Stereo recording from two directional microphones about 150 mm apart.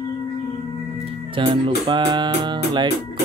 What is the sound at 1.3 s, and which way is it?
Speech, 35° right (ahead or behind).